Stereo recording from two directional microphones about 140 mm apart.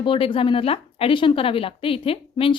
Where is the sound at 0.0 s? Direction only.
40° left (ahead or behind).